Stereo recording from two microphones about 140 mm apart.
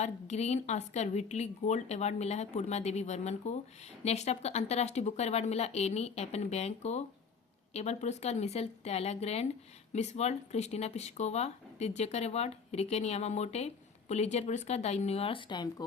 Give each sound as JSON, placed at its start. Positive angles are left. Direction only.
{"t": 0.0, "sound": "speech", "side_deg": 50}